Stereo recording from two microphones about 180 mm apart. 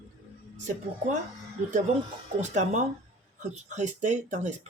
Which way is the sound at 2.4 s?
40° right (ahead or behind).